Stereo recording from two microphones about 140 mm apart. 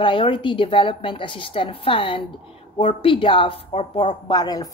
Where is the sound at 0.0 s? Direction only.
40° left (ahead or behind).